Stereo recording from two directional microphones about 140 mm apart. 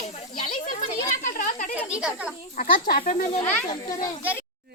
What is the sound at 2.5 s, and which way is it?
Speech, 80° left.